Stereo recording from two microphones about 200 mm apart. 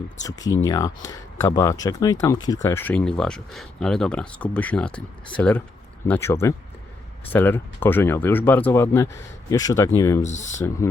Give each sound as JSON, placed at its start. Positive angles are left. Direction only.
{"t": 0.2, "sound": "speech", "side_deg": 20}
{"t": 10.2, "sound": "speech", "side_deg": 35}